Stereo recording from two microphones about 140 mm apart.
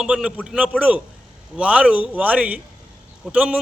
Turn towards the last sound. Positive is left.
turn(degrees=-10)  # may be behind; listen again after turning